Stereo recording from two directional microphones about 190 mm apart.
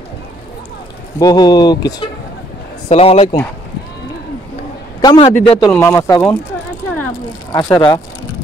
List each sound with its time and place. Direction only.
1.2 s speech: 20° left (ahead or behind)
2.9 s a man's voice: 30° left (ahead or behind)
5.0 s a man's voice: 30° left (ahead or behind)
5.7 s speech: 10° left (ahead or behind)
7.5 s speech: 20° left (ahead or behind)